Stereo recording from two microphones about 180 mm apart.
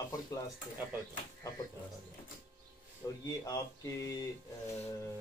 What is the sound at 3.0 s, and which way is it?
Speech, 20° left (ahead or behind).